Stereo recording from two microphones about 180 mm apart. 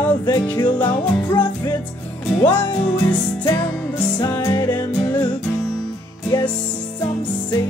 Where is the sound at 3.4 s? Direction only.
20° left (ahead or behind).